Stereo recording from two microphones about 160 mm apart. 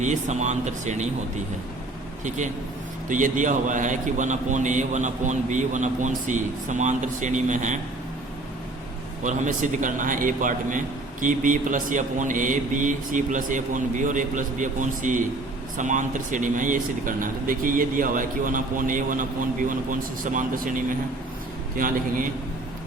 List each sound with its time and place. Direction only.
0.0 s a man's voice: 50° right (ahead or behind)
3.1 s a man's voice: 55° right (ahead or behind)
9.2 s a man's voice: 50° right (ahead or behind)